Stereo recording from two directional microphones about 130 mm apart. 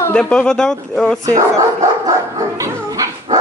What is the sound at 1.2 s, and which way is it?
Speech, 25° right (ahead or behind).